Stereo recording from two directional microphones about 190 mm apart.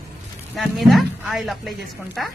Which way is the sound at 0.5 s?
Centre (ahead or behind).